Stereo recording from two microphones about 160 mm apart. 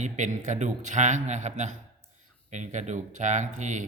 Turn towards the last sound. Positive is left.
turn(degrees=-50)  # may be behind; listen again after turning